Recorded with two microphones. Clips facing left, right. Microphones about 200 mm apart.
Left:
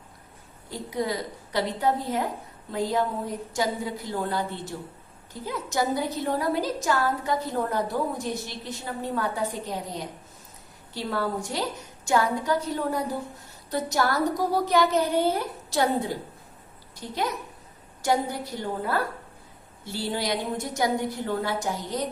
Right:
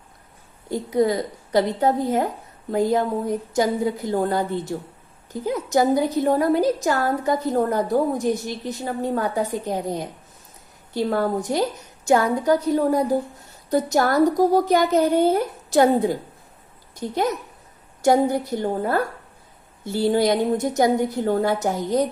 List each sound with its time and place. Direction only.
0.7 s a woman's voice: 50° right (ahead or behind)
5.5 s a woman's voice: 45° right (ahead or behind)